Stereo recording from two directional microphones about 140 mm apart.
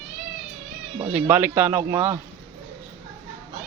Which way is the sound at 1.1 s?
15° right (ahead or behind).